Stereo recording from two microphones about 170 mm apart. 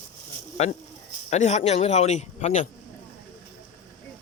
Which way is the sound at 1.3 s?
40° left (ahead or behind).